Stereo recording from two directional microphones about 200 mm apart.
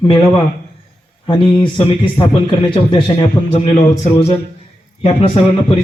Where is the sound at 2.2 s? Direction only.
20° left (ahead or behind).